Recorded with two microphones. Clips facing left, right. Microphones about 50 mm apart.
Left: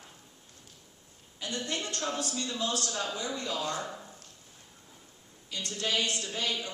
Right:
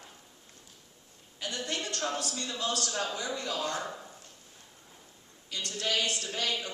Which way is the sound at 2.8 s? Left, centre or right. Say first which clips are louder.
Right 1 dB; right.